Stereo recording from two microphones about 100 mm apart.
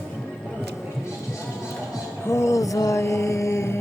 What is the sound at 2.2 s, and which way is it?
Music, 30° left (ahead or behind).